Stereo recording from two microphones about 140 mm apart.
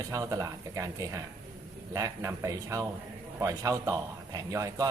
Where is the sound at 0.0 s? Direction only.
25° right (ahead or behind).